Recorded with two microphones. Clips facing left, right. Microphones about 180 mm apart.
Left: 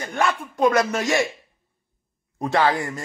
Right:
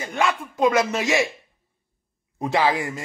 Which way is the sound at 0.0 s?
Centre (ahead or behind).